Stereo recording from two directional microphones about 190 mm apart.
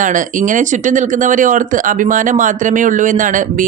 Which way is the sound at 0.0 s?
45° right (ahead or behind).